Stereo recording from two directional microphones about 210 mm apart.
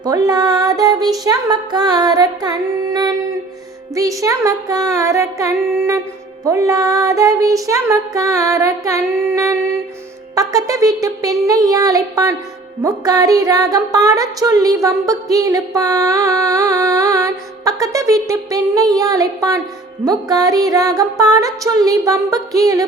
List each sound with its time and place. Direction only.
0.0 s music: 20° right (ahead or behind)